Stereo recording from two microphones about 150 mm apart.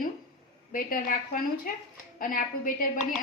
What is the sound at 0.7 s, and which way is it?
A woman's voice, 65° left (ahead or behind).